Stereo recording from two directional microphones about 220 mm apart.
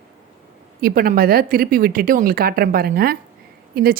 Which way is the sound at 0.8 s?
40° right (ahead or behind).